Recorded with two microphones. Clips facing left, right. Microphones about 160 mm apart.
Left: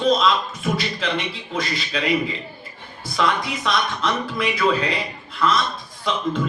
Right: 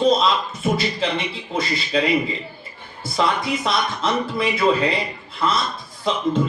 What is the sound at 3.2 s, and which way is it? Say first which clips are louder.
A man's voice: right 1 dB; 30° right (ahead or behind).